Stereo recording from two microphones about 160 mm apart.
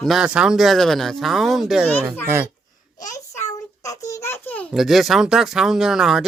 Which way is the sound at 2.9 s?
20° left (ahead or behind).